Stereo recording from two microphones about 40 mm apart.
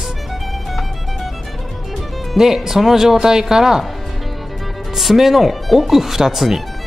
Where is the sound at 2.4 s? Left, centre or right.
Centre.